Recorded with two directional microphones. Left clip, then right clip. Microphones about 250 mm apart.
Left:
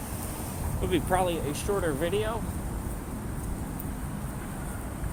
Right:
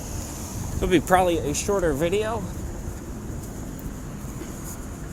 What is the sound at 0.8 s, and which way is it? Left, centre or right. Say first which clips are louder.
Speech: right 7 dB; right.